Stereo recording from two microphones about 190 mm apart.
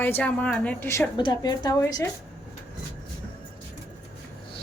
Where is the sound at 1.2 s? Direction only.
20° left (ahead or behind).